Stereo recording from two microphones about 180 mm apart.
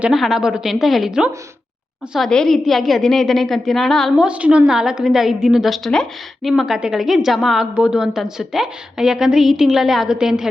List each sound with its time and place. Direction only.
0.0 s a woman's voice: centre (ahead or behind)